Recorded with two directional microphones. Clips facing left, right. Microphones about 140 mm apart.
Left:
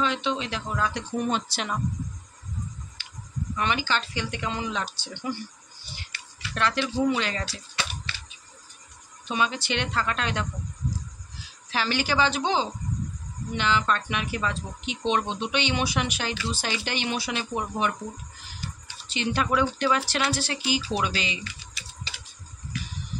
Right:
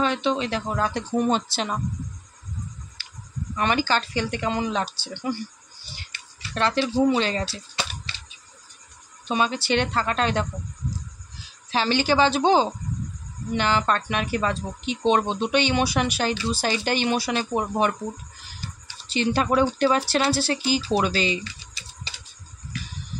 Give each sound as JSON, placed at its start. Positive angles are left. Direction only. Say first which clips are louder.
{"t": 0.0, "sound": "speech", "louder": "right 4 dB", "side_deg": -45}
{"t": 3.0, "sound": "clicking", "louder": "even", "side_deg": -35}
{"t": 3.5, "sound": "speech", "louder": "right 4 dB", "side_deg": -45}
{"t": 6.5, "sound": "speech", "louder": "right 4 dB", "side_deg": -30}
{"t": 9.3, "sound": "speech", "louder": "right 4 dB", "side_deg": -35}
{"t": 11.7, "sound": "speech", "louder": "right 5 dB", "side_deg": -25}
{"t": 19.1, "sound": "speech", "louder": "right 4 dB", "side_deg": -35}